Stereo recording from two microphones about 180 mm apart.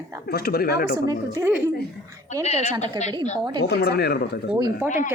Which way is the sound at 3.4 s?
25° right (ahead or behind).